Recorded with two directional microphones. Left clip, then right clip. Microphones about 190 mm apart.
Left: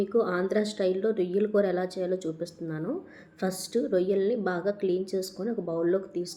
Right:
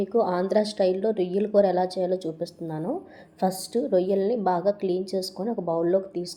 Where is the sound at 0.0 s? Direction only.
15° right (ahead or behind).